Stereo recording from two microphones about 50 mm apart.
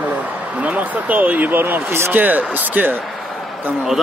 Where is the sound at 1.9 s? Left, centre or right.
Right.